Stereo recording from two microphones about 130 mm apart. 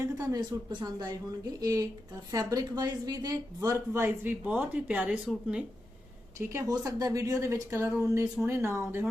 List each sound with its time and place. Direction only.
0.0 s speech: 25° right (ahead or behind); by 5.6 s 5° right (ahead or behind)
6.5 s speech: 25° right (ahead or behind)